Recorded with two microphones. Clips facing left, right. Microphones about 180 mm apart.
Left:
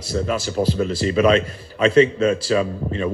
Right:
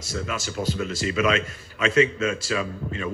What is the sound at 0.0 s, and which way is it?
A man's voice, 35° left (ahead or behind).